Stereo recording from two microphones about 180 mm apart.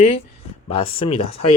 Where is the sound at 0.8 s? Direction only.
30° left (ahead or behind).